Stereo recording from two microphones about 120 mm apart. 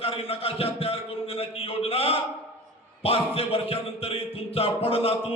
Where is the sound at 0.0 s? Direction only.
55° left (ahead or behind).